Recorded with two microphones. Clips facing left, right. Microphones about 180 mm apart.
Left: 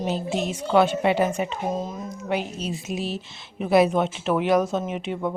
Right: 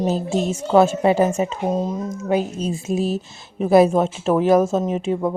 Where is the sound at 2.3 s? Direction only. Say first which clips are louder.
Right 6 dB; 50° right (ahead or behind).